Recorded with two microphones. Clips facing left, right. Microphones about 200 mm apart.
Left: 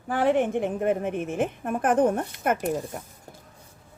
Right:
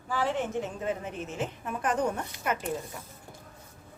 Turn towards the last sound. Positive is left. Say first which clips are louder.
# left 6 dB
turn(degrees=45)  # may be behind; listen again after turning